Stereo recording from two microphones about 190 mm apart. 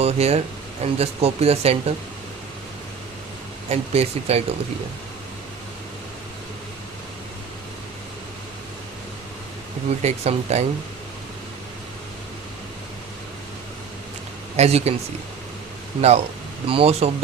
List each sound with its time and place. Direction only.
0.0 s speech: 35° right (ahead or behind)
3.7 s speech: 35° right (ahead or behind)
10.0 s speech: 35° right (ahead or behind)
14.5 s speech: 35° right (ahead or behind)
16.0 s speech: 35° right (ahead or behind)